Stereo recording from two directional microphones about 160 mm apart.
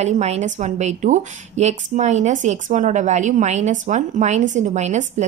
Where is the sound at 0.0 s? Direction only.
45° right (ahead or behind).